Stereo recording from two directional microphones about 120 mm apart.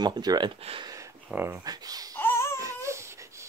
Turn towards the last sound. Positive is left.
turn(degrees=-25)  # may be behind; listen again after turning